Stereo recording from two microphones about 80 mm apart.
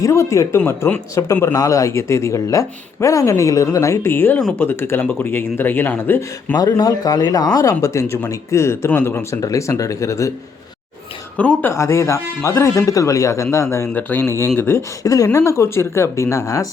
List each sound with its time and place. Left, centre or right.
0.0 s speech: left
6.6 s speech: left
9.3 s speech: left
11.3 s speech: centre
11.7 s speech: left
13.9 s speech: left
14.3 s speech: left
15.0 s speech: left